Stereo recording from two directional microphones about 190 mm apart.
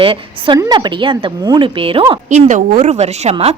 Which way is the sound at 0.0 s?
30° right (ahead or behind).